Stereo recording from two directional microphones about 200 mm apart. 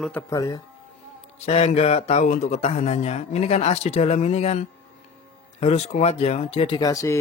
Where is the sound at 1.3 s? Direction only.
30° left (ahead or behind).